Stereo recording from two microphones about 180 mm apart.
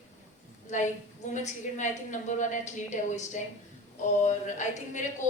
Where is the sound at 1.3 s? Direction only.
40° left (ahead or behind).